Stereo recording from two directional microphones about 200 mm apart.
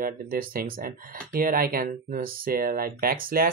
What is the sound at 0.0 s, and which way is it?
Speech, 45° right (ahead or behind).